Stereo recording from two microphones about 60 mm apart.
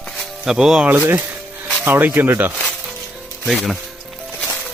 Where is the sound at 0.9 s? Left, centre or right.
Right.